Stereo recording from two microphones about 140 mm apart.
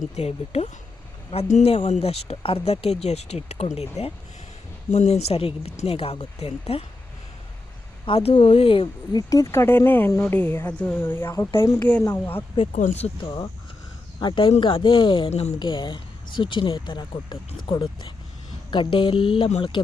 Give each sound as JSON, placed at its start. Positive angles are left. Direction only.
{"t": 0.2, "sound": "speech", "side_deg": 50}
{"t": 8.0, "sound": "speech", "side_deg": 40}
{"t": 9.1, "sound": "speech", "side_deg": 25}
{"t": 12.1, "sound": "speech", "side_deg": 15}
{"t": 13.0, "sound": "speech", "side_deg": 40}
{"t": 15.3, "sound": "speech", "side_deg": 50}
{"t": 15.5, "sound": "speech", "side_deg": 35}